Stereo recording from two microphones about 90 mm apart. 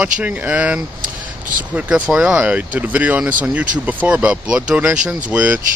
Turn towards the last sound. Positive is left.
turn(degrees=-15)  # may be behind; listen again after turning